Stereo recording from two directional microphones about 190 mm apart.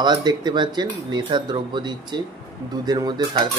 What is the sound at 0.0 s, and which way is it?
Speech, 20° right (ahead or behind).